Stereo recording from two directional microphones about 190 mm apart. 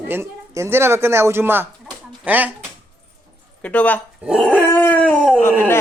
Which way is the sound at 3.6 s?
5° left (ahead or behind).